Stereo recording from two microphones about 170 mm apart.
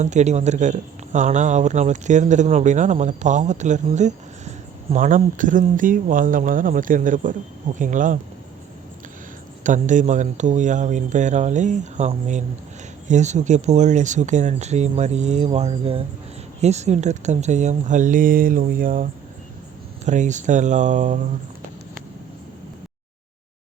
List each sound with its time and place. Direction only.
0.0 s speech: 45° right (ahead or behind)
9.6 s speech: 45° right (ahead or behind)
20.1 s speech: 45° right (ahead or behind)